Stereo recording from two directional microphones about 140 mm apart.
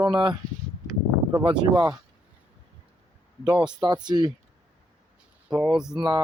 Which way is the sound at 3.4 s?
30° right (ahead or behind).